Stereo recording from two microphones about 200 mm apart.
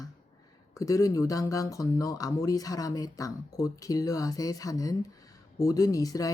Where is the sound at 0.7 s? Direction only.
15° left (ahead or behind).